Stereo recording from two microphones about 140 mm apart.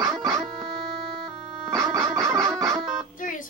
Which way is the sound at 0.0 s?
20° right (ahead or behind).